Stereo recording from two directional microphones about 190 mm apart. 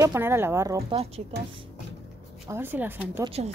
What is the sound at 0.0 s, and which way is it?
Speech, 15° right (ahead or behind).